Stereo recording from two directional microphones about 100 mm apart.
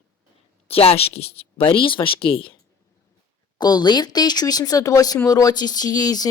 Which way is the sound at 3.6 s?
45° left (ahead or behind).